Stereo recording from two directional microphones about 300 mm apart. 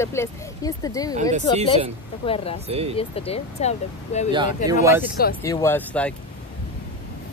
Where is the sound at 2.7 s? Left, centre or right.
Centre.